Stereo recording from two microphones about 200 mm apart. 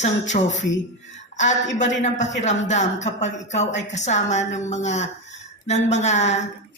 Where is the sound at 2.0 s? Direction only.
35° left (ahead or behind).